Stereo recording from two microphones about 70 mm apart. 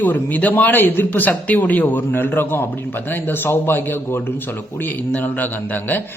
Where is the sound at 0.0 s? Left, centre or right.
Left.